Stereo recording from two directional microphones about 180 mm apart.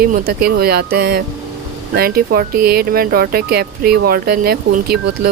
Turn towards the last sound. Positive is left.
turn(degrees=-60)  # may be behind; listen again after turning